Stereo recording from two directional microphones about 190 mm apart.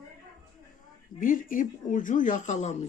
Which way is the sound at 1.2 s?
45° left (ahead or behind).